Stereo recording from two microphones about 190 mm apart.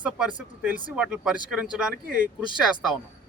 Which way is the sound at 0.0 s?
5° right (ahead or behind).